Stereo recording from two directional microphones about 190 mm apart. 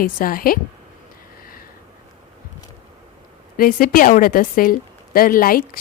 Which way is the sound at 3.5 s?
50° left (ahead or behind).